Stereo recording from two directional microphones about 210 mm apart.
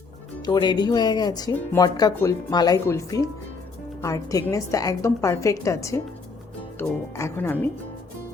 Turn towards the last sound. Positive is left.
turn(degrees=10)  # may be behind; listen again after turning